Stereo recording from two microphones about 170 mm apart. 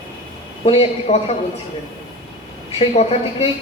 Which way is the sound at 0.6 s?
35° left (ahead or behind).